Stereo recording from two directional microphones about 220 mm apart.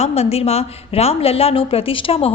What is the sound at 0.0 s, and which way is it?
A woman's voice, 30° left (ahead or behind).